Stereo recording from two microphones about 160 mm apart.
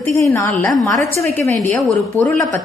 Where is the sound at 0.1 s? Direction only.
20° left (ahead or behind).